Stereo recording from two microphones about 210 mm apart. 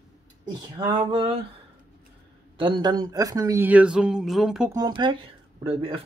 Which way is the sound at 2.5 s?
20° right (ahead or behind).